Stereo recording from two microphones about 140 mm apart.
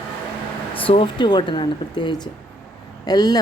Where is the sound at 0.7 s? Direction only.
40° left (ahead or behind).